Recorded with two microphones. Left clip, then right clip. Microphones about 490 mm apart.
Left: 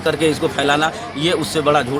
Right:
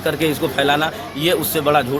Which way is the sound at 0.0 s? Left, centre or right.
Right.